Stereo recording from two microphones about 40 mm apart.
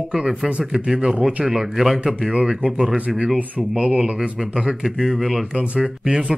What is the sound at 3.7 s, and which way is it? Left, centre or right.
Speech, right.